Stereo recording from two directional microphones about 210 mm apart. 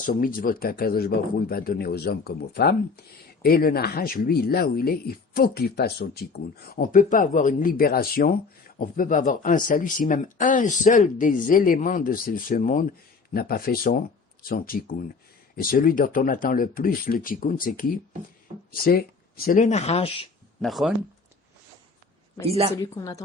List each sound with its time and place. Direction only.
0.0 s speech: 40° left (ahead or behind)
18.7 s speech: 45° left (ahead or behind); by 20.2 s 30° left (ahead or behind)
20.6 s speech: centre (ahead or behind)
22.8 s speech: 15° left (ahead or behind)